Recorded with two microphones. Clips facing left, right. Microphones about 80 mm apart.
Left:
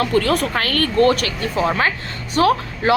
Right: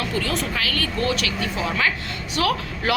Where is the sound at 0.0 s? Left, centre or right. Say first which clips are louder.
Left 8 dB; left.